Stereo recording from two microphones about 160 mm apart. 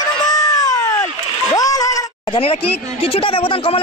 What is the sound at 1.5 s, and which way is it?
Speech, 20° left (ahead or behind).